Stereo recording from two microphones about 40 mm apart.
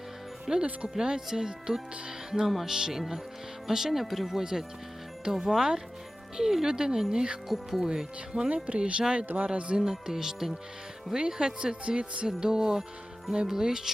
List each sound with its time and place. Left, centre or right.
0.5 s speech: centre
7.4 s speech: centre
7.9 s speech: centre
9.2 s speech: right
9.5 s speech: right
9.8 s speech: centre; by 12.3 s right
12.4 s speech: centre